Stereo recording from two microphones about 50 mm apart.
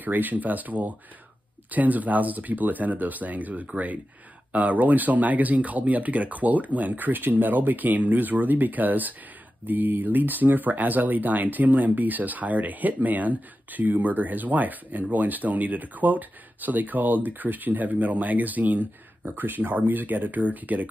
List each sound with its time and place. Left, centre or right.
0.0 s speech: right